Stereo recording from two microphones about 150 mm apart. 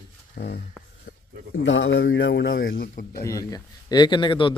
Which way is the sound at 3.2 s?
25° left (ahead or behind).